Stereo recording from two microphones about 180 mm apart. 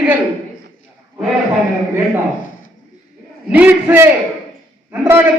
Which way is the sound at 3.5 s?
10° right (ahead or behind).